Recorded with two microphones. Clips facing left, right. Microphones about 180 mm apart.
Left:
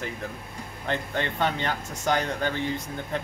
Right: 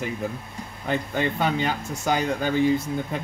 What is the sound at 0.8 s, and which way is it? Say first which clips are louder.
Speech: right 4 dB; 10° right (ahead or behind).